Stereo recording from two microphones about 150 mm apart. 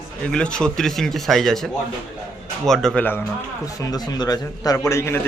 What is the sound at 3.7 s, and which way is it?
A man's voice, 25° left (ahead or behind).